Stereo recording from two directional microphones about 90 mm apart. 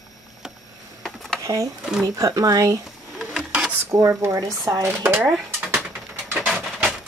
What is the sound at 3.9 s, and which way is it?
Speech, 35° right (ahead or behind).